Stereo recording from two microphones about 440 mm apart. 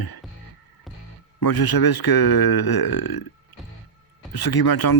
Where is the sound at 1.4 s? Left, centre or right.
Left.